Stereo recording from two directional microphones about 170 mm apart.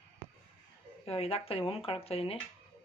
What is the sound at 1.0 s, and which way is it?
Speech, 35° left (ahead or behind).